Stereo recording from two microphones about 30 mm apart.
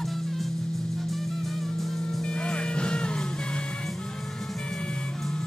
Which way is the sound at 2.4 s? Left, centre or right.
Left.